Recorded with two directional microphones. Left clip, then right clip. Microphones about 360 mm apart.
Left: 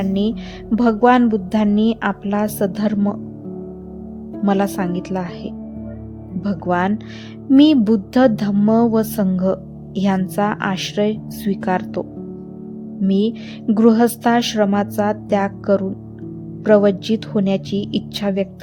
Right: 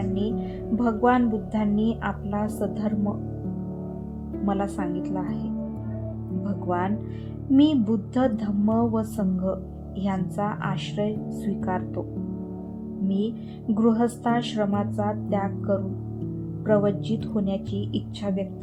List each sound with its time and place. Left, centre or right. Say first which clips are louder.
0.1 s speech: left 6 dB; centre
4.4 s a woman's voice: left 8 dB; centre
13.1 s speech: left 10 dB; centre